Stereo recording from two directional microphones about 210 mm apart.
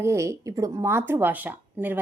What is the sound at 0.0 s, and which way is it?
Speech, 15° right (ahead or behind).